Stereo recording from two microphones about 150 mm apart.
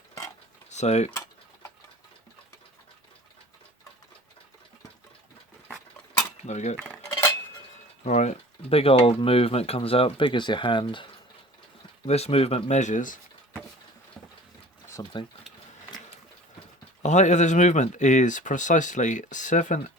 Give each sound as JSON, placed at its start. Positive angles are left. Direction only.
{"t": 0.7, "sound": "cutlery", "side_deg": 50}
{"t": 6.4, "sound": "cutlery", "side_deg": 50}
{"t": 8.0, "sound": "speech", "side_deg": 50}
{"t": 12.0, "sound": "speech", "side_deg": 45}
{"t": 15.1, "sound": "speech", "side_deg": 30}
{"t": 17.0, "sound": "speech", "side_deg": 50}